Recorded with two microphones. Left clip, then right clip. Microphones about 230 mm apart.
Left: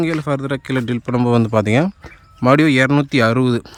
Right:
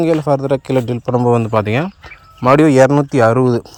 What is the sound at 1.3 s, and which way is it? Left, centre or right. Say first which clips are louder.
Speech: even; centre.